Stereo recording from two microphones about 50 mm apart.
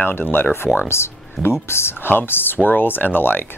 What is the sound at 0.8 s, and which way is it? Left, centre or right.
Speech, left.